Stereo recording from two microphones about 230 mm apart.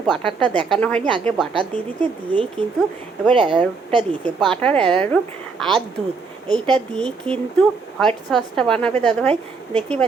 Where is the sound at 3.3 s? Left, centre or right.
Right.